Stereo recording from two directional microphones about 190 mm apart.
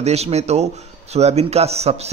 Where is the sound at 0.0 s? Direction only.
35° right (ahead or behind).